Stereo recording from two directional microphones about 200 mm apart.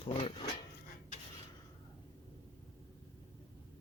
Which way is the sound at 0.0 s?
25° left (ahead or behind).